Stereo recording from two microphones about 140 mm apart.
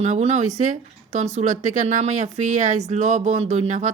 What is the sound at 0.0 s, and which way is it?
A woman's voice, 50° right (ahead or behind).